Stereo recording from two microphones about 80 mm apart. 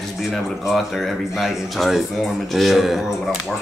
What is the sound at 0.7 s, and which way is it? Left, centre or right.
Speech, centre.